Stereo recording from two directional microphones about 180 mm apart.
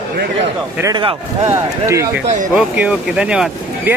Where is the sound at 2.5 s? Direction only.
5° right (ahead or behind).